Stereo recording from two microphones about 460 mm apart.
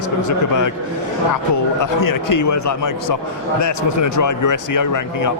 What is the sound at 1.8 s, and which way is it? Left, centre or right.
Speech, left.